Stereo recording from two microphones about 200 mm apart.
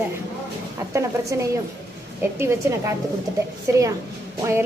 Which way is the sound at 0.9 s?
15° right (ahead or behind).